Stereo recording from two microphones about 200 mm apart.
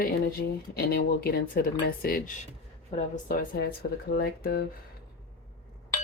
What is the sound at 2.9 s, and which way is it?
Speech, 30° left (ahead or behind).